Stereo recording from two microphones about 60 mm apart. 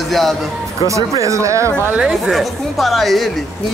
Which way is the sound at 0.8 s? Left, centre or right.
Right.